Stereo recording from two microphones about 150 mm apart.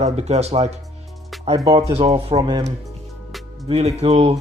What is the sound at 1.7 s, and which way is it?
Speech, 35° right (ahead or behind).